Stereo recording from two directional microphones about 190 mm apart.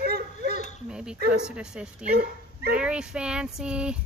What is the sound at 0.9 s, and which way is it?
Speech, 5° right (ahead or behind).